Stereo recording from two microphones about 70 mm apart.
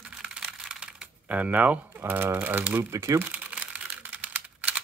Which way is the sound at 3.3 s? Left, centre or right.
Centre.